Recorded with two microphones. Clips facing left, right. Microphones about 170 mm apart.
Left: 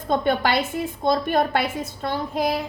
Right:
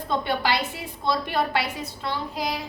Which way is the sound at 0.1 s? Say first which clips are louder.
Left 4 dB; 50° left (ahead or behind).